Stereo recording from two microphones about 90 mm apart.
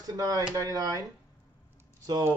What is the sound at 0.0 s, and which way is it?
A man's voice, 45° right (ahead or behind).